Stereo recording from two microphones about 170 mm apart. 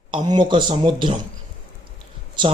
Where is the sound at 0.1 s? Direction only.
25° right (ahead or behind).